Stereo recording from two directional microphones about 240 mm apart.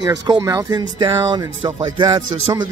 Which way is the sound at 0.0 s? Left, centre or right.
Centre.